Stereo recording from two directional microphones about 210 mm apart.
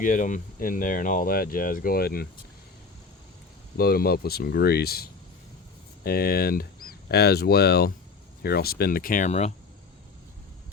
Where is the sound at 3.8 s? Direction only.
45° left (ahead or behind).